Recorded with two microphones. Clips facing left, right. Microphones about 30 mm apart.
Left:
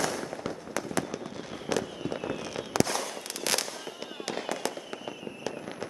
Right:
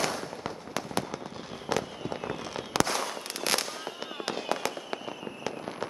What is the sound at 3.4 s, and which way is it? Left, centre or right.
Fireworks, centre.